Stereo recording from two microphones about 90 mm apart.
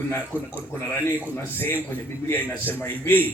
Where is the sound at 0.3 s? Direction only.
20° right (ahead or behind).